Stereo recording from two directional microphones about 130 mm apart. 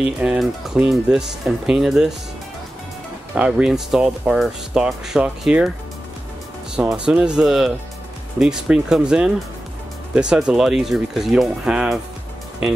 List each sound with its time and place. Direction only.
0.2 s speech: 5° right (ahead or behind)
3.3 s speech: 10° right (ahead or behind)
6.7 s speech: 5° right (ahead or behind)